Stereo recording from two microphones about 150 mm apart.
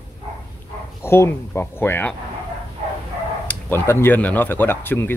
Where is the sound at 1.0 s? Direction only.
15° left (ahead or behind).